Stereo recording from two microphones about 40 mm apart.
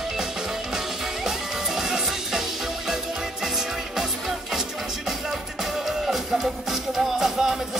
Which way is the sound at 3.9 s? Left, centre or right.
Centre.